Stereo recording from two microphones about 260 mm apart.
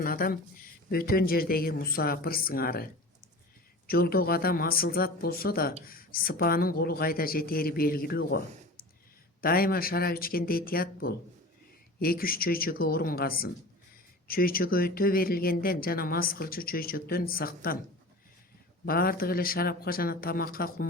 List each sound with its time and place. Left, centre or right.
0.0 s speech: left
3.8 s speech: left
9.4 s speech: left
18.9 s speech: left